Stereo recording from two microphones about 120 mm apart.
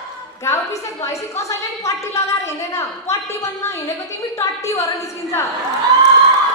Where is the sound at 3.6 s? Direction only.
25° left (ahead or behind).